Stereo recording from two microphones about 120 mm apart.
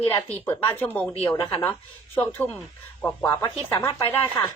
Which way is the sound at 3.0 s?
20° left (ahead or behind).